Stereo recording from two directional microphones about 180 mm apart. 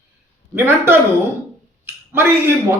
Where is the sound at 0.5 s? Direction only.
15° right (ahead or behind).